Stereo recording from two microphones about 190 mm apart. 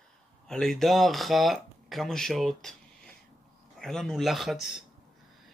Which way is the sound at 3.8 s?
Centre (ahead or behind).